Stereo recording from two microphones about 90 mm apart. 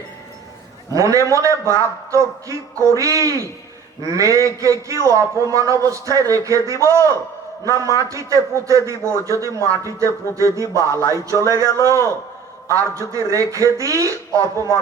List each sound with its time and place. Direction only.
0.9 s a man's voice: 40° right (ahead or behind)